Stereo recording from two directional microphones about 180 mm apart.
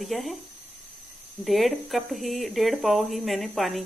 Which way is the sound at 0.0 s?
Centre (ahead or behind).